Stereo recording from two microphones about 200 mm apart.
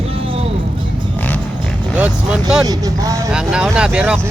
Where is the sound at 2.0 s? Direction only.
5° right (ahead or behind).